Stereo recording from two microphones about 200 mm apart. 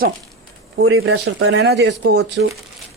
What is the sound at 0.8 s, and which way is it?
Speech, 90° right.